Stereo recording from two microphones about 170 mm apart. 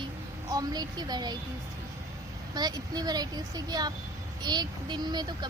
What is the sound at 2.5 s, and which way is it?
Speech, 25° right (ahead or behind).